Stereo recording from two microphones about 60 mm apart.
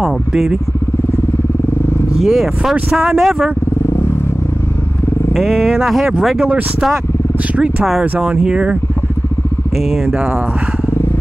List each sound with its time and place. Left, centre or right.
0.0 s speech: centre
2.1 s speech: centre
5.3 s speech: centre
8.2 s speech: centre